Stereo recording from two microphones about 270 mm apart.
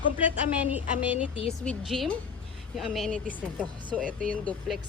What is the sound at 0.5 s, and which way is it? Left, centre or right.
Speech, centre.